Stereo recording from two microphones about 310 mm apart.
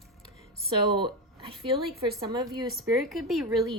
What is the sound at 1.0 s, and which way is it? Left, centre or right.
Speech, centre.